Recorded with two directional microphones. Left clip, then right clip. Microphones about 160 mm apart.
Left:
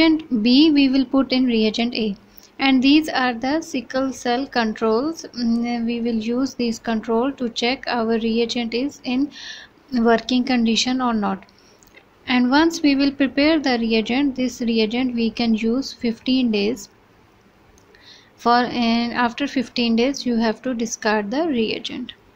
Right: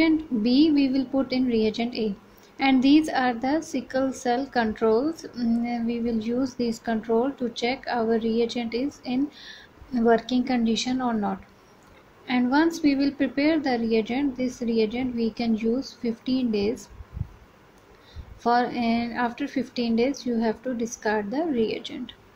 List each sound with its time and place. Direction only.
0.0 s a woman's voice: 15° left (ahead or behind)
18.4 s a woman's voice: 15° left (ahead or behind)